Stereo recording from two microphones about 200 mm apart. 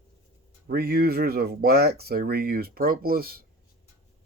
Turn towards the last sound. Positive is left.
turn(degrees=-50)  # may be behind; listen again after turning